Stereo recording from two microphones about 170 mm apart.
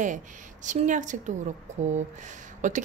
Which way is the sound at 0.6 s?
45° right (ahead or behind).